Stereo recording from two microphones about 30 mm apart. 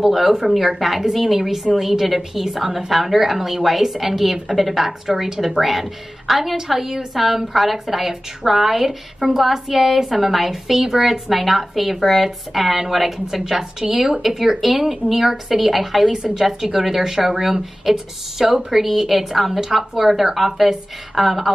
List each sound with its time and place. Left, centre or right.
0.0 s a woman's voice: centre
16.1 s a woman's voice: right
16.3 s a woman's voice: centre